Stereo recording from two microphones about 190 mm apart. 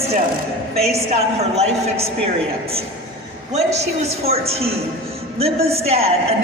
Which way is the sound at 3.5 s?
35° right (ahead or behind).